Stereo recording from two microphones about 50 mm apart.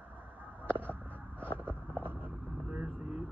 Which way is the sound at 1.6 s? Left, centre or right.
Right.